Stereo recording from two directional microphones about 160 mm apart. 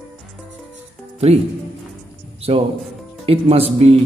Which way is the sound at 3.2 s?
40° right (ahead or behind).